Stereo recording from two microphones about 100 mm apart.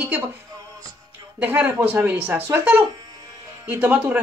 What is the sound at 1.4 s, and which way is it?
A woman's voice, 20° right (ahead or behind).